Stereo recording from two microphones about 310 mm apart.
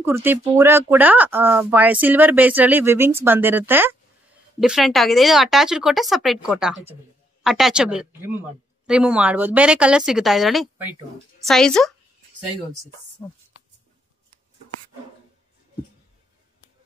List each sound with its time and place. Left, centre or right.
0.0 s speech: centre